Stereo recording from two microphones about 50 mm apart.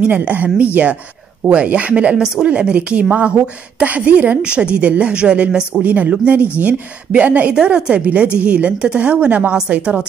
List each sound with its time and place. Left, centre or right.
0.2 s a woman's voice: right
2.1 s a woman's voice: centre
5.8 s a woman's voice: right
7.5 s a woman's voice: centre